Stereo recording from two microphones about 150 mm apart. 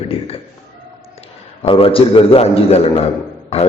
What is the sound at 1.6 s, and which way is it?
A man's voice, 35° left (ahead or behind).